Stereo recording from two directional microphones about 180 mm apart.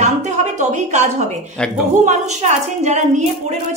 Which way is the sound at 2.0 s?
40° right (ahead or behind).